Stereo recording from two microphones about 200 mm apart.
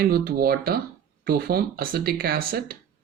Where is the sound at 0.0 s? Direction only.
50° right (ahead or behind).